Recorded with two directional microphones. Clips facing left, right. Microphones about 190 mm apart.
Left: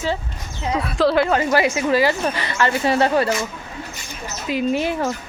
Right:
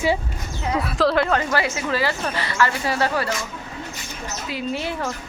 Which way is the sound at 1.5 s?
15° left (ahead or behind).